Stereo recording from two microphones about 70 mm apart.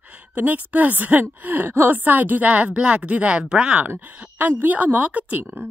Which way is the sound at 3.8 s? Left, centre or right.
Right.